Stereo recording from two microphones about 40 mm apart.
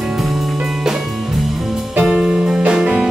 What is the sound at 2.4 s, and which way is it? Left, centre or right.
Music, right.